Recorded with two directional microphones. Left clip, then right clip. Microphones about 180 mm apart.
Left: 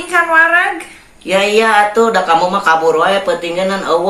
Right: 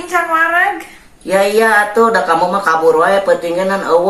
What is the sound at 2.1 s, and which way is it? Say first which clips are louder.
Speech: left 1 dB; 35° left (ahead or behind).